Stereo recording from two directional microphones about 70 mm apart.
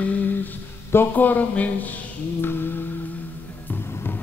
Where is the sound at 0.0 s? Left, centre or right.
Left.